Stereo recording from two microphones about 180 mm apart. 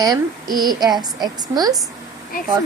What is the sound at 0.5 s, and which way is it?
A woman's voice, 20° right (ahead or behind).